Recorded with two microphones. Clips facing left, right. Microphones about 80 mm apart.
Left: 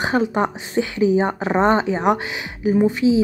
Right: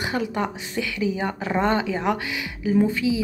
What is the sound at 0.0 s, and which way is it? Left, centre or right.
A woman's voice, left.